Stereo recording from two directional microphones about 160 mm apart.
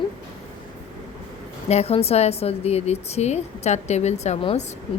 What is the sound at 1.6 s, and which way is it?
A woman's voice, 40° left (ahead or behind).